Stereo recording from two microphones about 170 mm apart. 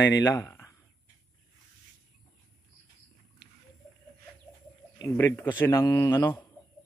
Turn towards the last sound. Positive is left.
turn(degrees=10)  # may be behind; listen again after turning